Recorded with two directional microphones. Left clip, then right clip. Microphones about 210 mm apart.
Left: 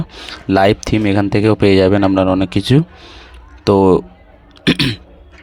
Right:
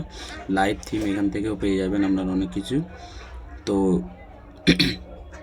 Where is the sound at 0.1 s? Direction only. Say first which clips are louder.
Left 11 dB; 40° left (ahead or behind).